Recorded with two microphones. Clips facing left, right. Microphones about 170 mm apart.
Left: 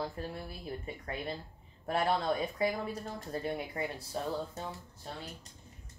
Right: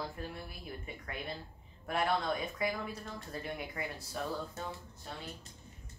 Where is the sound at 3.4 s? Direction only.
30° left (ahead or behind).